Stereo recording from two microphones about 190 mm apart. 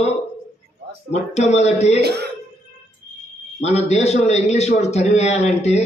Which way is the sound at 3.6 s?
35° left (ahead or behind).